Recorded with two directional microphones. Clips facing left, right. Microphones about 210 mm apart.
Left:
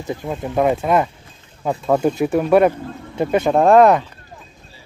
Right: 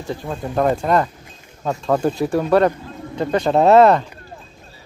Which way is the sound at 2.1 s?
20° left (ahead or behind).